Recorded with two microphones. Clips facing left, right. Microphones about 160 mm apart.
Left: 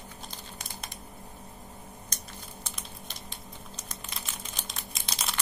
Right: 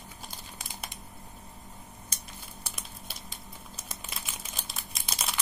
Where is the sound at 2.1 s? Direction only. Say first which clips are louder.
Left 2 dB; 5° right (ahead or behind).